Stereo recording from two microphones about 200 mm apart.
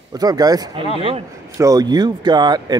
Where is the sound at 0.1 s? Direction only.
20° right (ahead or behind).